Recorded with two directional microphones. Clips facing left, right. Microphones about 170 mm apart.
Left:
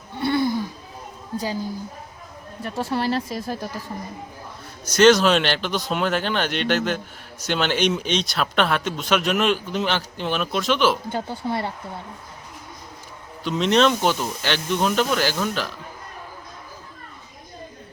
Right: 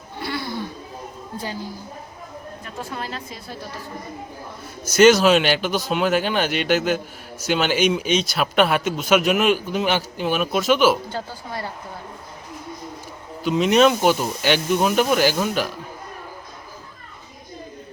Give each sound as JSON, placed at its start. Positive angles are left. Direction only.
{"t": 0.2, "sound": "a sound", "side_deg": 25}
{"t": 2.7, "sound": "speech", "side_deg": 40}
{"t": 4.9, "sound": "a man's voice", "side_deg": -5}
{"t": 11.1, "sound": "speech", "side_deg": 25}
{"t": 13.4, "sound": "a man's voice", "side_deg": -5}